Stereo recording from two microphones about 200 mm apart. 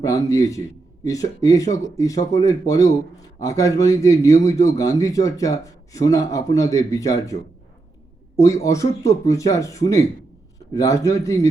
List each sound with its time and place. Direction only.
0.0 s speech: 15° left (ahead or behind)
8.4 s speech: 15° left (ahead or behind)